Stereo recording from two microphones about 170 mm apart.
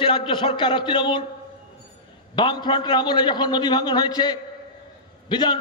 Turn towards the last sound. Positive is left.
turn(degrees=25)  # may be behind; listen again after turning